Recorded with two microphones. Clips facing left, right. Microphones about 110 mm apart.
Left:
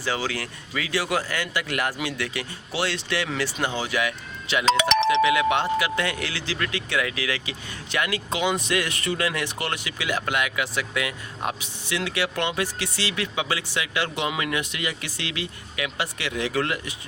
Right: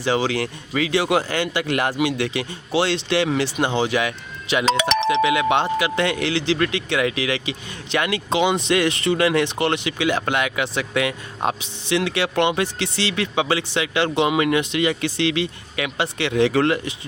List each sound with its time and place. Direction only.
0.0 s speech: 20° right (ahead or behind)